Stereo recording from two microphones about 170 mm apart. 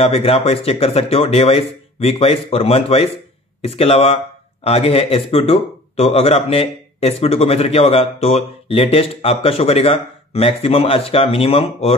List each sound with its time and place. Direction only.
0.0 s a man's voice: 35° left (ahead or behind)